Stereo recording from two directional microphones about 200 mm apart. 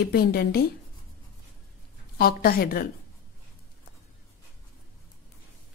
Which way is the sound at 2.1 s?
50° left (ahead or behind).